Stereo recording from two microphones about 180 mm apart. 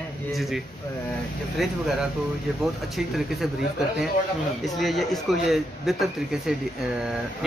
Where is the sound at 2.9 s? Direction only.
Centre (ahead or behind).